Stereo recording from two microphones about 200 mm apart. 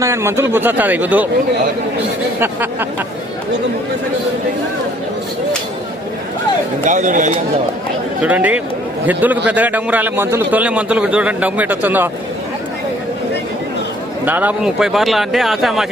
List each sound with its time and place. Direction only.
0.0 s a man's voice: 15° right (ahead or behind)
6.8 s speech: 35° right (ahead or behind)
8.2 s a man's voice: 5° right (ahead or behind)
14.3 s speech: 10° right (ahead or behind)